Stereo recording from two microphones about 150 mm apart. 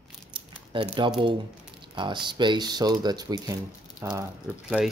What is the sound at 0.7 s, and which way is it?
Speech, 35° right (ahead or behind).